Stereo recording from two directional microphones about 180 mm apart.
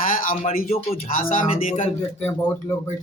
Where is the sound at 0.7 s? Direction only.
35° left (ahead or behind).